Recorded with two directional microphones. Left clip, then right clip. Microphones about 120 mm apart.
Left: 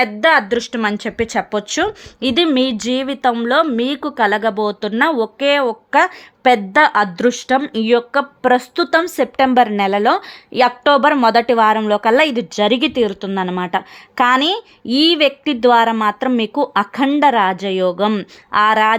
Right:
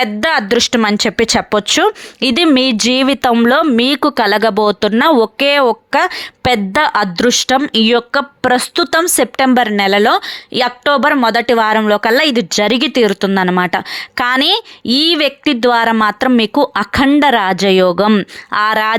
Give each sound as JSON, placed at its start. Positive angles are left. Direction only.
{"t": 0.0, "sound": "a woman's voice", "side_deg": -55}
{"t": 0.8, "sound": "speech", "side_deg": -45}
{"t": 1.9, "sound": "a woman's voice", "side_deg": -40}
{"t": 2.6, "sound": "speech", "side_deg": -60}
{"t": 3.8, "sound": "a woman's voice", "side_deg": -45}
{"t": 7.2, "sound": "a woman's voice", "side_deg": -40}
{"t": 11.2, "sound": "speech", "side_deg": -20}
{"t": 12.5, "sound": "a woman's voice", "side_deg": -50}
{"t": 12.8, "sound": "a woman's voice", "side_deg": -35}
{"t": 13.1, "sound": "a woman's voice", "side_deg": -50}
{"t": 18.1, "sound": "a woman's voice", "side_deg": -35}